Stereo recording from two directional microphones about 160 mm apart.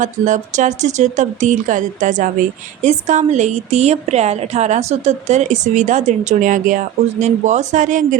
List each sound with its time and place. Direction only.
0.0 s a woman's voice: 50° right (ahead or behind)